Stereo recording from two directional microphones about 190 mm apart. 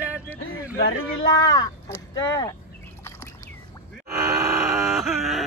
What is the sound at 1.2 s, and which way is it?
Speech, 20° left (ahead or behind).